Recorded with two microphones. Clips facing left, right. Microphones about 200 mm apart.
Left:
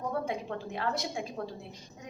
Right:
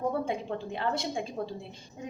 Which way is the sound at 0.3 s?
25° right (ahead or behind).